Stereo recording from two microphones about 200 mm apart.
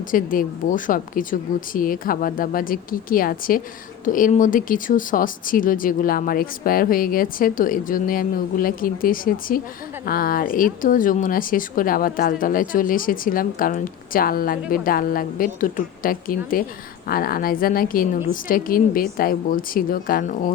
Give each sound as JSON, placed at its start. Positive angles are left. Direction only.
{"t": 0.1, "sound": "speech", "side_deg": 45}